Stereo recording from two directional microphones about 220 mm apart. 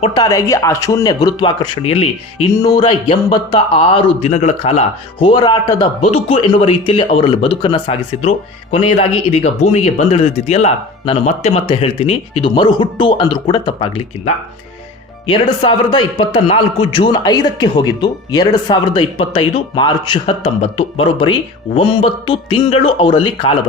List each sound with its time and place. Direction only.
0.0 s a man's voice: 20° left (ahead or behind)
15.3 s a man's voice: 20° left (ahead or behind)